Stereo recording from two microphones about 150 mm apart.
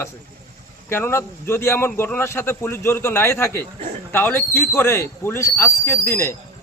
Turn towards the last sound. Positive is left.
turn(degrees=15)  # may be behind; listen again after turning